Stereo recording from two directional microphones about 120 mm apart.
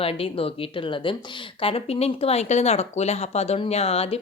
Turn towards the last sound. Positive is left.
turn(degrees=55)  # may be behind; listen again after turning